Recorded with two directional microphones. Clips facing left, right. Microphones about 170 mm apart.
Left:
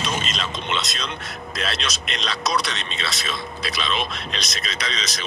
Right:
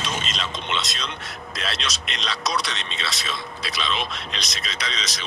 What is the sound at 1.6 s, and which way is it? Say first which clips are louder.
Speech: left 2 dB; 50° left (ahead or behind).